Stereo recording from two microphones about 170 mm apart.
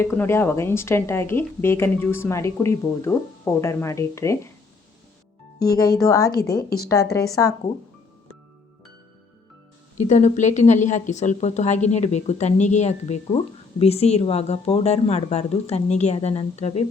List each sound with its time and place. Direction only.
0.0 s speech: 15° left (ahead or behind)
6.0 s a woman's voice: 20° left (ahead or behind)
10.0 s a woman's voice: 45° left (ahead or behind)